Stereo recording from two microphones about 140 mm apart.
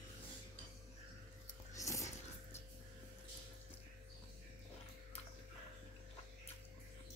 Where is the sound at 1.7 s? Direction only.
20° left (ahead or behind).